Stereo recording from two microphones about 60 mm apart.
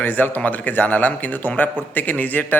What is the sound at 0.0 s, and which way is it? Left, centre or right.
Speech, left.